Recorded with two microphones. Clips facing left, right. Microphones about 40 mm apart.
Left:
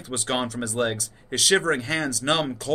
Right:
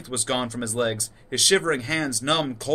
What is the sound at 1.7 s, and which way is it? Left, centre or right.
Speech, left.